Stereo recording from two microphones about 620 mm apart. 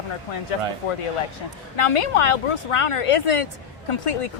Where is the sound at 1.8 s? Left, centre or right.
Left.